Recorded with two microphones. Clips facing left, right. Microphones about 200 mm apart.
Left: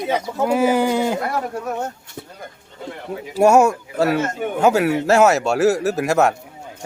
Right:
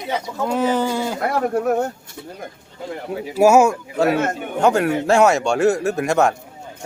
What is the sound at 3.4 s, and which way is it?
Speech, centre (ahead or behind).